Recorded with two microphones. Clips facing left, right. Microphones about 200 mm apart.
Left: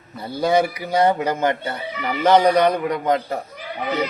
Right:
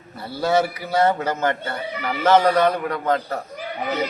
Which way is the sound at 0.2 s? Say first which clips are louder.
Left 2 dB; 15° left (ahead or behind).